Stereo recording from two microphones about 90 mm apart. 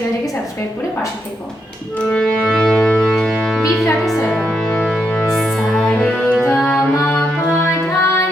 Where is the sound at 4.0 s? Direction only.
Centre (ahead or behind).